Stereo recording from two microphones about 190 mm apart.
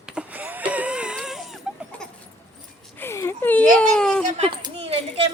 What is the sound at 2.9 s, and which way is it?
Whimper, 15° left (ahead or behind).